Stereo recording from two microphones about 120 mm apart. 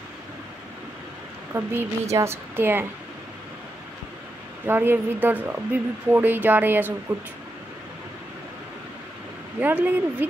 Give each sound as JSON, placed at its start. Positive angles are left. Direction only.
{"t": 1.5, "sound": "speech", "side_deg": -15}
{"t": 4.6, "sound": "speech", "side_deg": -15}
{"t": 9.6, "sound": "speech", "side_deg": -15}